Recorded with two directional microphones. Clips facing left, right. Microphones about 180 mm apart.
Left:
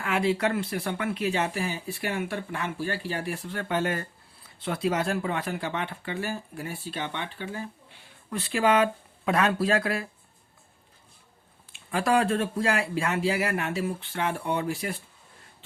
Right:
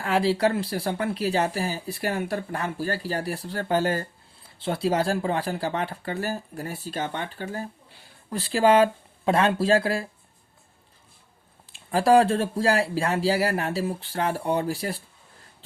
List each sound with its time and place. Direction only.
0.0 s speech: 35° right (ahead or behind)
11.7 s speech: 35° right (ahead or behind)